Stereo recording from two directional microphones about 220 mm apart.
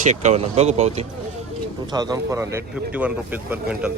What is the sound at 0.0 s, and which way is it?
Speech, 30° right (ahead or behind).